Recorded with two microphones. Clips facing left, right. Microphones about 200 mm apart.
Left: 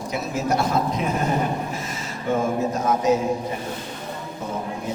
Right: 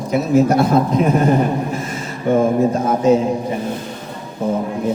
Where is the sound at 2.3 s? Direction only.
55° right (ahead or behind).